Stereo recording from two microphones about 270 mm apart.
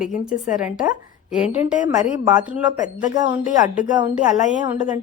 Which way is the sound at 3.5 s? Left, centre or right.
Left.